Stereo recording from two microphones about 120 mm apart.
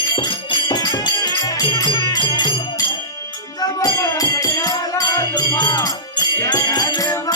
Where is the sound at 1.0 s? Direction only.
40° left (ahead or behind).